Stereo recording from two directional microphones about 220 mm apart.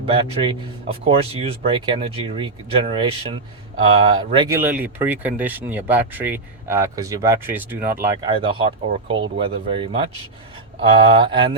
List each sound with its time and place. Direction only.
0.0 s speech: 25° right (ahead or behind)